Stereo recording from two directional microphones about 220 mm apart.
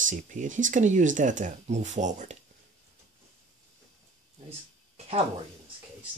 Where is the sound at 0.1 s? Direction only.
35° right (ahead or behind).